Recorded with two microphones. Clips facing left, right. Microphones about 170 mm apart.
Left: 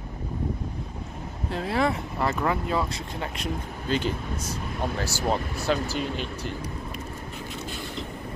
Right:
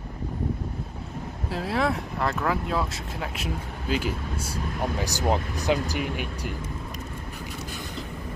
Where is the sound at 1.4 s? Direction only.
Centre (ahead or behind).